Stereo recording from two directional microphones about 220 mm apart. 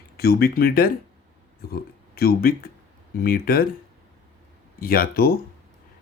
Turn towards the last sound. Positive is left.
turn(degrees=45)  # may be behind; listen again after turning